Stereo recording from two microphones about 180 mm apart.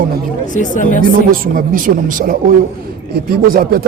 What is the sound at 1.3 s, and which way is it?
Speech, 50° right (ahead or behind).